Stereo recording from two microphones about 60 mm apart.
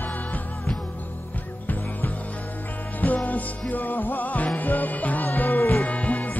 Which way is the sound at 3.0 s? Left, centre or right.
Left.